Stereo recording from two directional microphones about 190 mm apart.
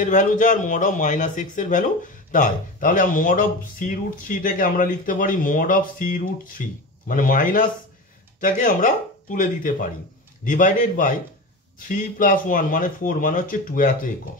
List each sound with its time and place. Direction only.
0.0 s speech: 40° left (ahead or behind)